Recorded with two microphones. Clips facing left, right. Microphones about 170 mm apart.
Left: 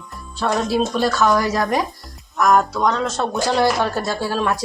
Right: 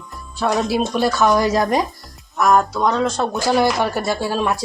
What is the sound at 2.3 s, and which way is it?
Speech, centre (ahead or behind).